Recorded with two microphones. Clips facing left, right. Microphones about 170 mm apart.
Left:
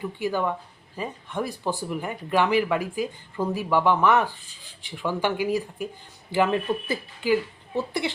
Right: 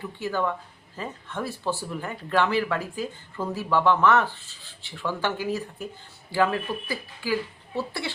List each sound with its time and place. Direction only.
0.2 s speech: 15° left (ahead or behind)